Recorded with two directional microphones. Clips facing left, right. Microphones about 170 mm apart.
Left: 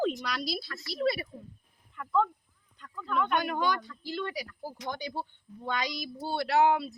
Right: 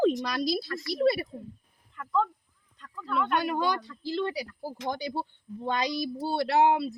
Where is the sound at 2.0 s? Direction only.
Centre (ahead or behind).